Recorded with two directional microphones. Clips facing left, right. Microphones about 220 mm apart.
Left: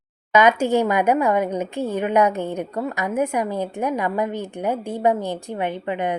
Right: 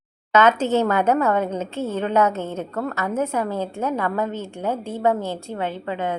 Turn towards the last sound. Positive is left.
turn(degrees=15)  # may be behind; listen again after turning